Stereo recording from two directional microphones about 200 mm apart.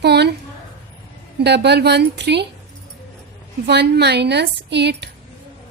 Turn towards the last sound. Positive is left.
turn(degrees=-55)  # may be behind; listen again after turning